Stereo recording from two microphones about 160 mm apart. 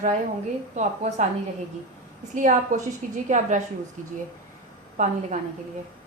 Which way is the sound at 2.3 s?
50° right (ahead or behind).